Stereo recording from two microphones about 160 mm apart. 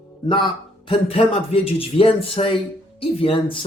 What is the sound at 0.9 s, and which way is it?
Speech, 35° left (ahead or behind).